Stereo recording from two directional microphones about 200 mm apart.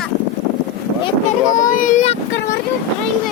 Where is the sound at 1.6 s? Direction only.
40° left (ahead or behind).